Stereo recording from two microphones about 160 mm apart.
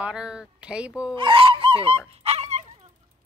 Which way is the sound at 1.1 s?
30° right (ahead or behind).